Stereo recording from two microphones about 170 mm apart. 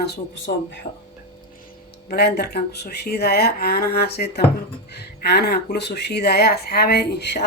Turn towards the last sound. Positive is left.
turn(degrees=80)